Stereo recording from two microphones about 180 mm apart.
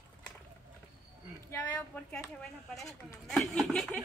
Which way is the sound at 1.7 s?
10° left (ahead or behind).